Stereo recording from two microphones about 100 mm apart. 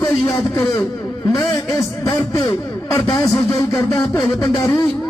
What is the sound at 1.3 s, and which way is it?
A man's voice, 40° left (ahead or behind).